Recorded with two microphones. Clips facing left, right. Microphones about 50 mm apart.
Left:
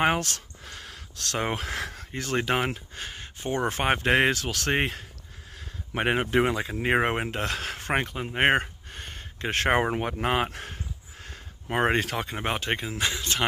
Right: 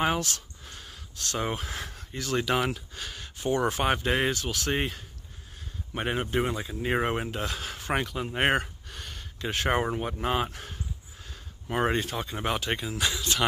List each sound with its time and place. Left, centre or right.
0.0 s speech: left
2.1 s speech: left
4.0 s speech: left
7.9 s speech: left
9.5 s speech: left
12.0 s speech: left
12.4 s speech: left